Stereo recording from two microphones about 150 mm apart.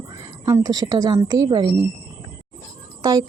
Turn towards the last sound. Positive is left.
turn(degrees=-25)  # may be behind; listen again after turning